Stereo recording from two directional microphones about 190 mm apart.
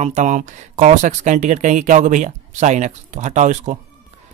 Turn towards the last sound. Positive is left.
turn(degrees=-40)  # may be behind; listen again after turning